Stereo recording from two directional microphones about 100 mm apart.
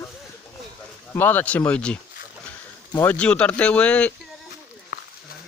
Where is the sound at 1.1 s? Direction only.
20° left (ahead or behind).